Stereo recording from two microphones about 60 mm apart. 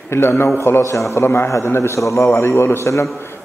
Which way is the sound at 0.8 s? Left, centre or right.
Left.